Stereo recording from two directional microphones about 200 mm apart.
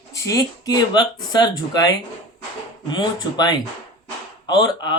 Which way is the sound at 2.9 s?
20° left (ahead or behind).